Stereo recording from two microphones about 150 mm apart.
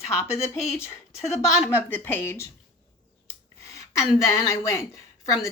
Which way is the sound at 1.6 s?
15° left (ahead or behind).